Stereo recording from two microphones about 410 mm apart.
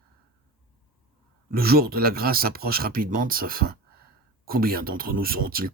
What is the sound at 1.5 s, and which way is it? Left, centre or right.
Speech, right.